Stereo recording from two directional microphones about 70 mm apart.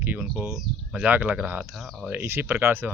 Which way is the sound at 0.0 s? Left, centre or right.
Right.